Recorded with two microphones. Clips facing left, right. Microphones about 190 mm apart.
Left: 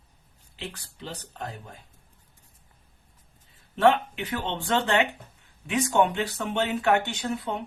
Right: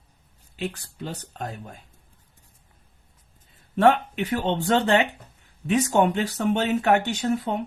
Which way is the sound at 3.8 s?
45° right (ahead or behind).